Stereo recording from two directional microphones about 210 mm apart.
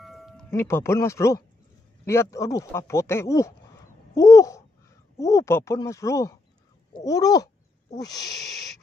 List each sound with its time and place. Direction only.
0.0 s music: centre (ahead or behind)
0.5 s speech: 10° left (ahead or behind)
4.1 s babbling: 15° left (ahead or behind)
5.1 s speech: 15° left (ahead or behind)